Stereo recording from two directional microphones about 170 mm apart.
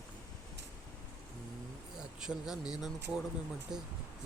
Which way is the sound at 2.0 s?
5° right (ahead or behind).